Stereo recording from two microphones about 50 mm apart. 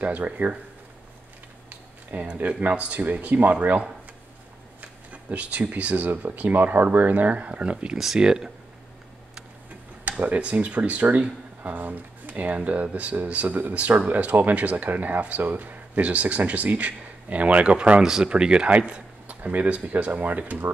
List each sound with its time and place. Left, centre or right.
0.0 s speech: right
1.7 s speech: right
5.1 s speech: right
10.2 s speech: right
18.0 s speech: centre
18.7 s a sound: right
19.4 s speech: right